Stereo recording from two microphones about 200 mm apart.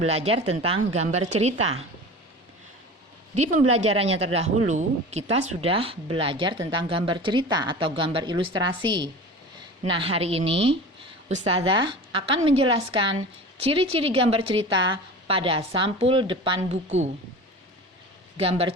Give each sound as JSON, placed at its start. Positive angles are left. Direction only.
{"t": 0.0, "sound": "speech", "side_deg": -30}
{"t": 3.3, "sound": "a woman's voice", "side_deg": -35}
{"t": 18.3, "sound": "a woman's voice", "side_deg": -30}